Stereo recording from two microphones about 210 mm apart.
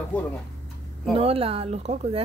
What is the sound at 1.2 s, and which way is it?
Speech, 25° right (ahead or behind).